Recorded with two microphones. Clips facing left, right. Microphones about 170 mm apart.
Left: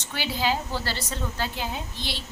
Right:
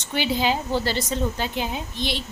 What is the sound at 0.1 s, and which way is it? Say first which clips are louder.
A woman's voice: right 4 dB; 20° right (ahead or behind).